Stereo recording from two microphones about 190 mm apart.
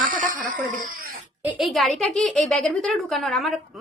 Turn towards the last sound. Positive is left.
turn(degrees=0)  # may be behind; listen again after turning